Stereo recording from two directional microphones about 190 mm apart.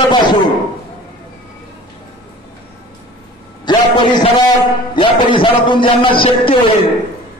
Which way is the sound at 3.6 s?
25° left (ahead or behind).